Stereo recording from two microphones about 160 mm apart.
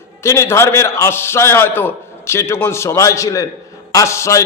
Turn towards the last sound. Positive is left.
turn(degrees=20)  # may be behind; listen again after turning